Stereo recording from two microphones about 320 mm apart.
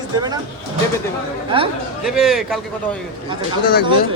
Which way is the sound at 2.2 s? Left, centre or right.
Centre.